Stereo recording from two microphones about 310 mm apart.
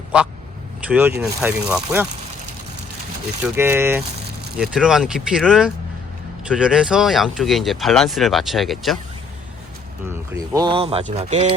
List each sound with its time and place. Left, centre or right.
0.9 s speech: centre
3.4 s speech: centre
10.1 s speech: centre